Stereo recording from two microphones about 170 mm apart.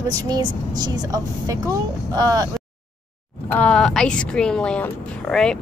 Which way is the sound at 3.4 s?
10° left (ahead or behind).